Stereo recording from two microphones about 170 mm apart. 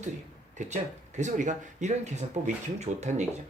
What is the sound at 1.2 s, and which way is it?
Speech, 45° right (ahead or behind).